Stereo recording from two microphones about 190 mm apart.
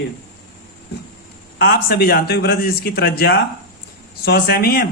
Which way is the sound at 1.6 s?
55° left (ahead or behind).